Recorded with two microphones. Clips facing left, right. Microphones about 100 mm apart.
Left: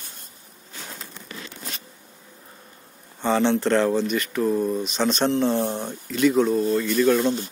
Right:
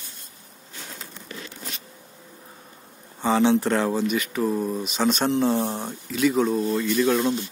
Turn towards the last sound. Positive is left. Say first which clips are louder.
# left 2 dB
turn(degrees=0)  # may be behind; listen again after turning